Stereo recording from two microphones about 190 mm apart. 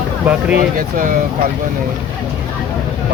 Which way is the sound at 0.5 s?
45° right (ahead or behind).